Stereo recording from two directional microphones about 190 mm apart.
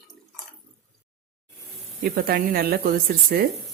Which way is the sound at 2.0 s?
50° right (ahead or behind).